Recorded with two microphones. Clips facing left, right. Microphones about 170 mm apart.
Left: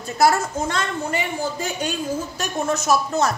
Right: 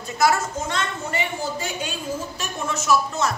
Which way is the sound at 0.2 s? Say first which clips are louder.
Left 2 dB; 35° left (ahead or behind).